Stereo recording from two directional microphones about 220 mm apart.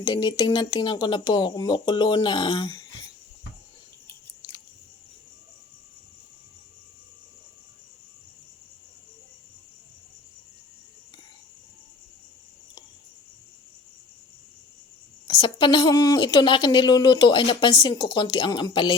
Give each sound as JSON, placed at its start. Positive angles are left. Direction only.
{"t": 0.0, "sound": "a woman's voice", "side_deg": 20}
{"t": 4.0, "sound": "chewing", "side_deg": 20}
{"t": 15.3, "sound": "a woman's voice", "side_deg": 20}